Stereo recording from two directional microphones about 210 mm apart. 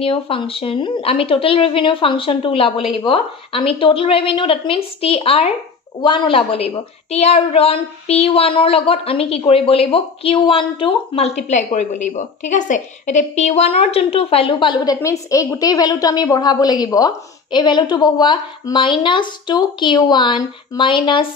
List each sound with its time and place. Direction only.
0.0 s a woman's voice: 25° left (ahead or behind)
15.0 s a woman's voice: 15° left (ahead or behind)